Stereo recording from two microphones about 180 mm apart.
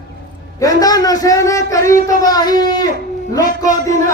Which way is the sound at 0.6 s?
20° left (ahead or behind).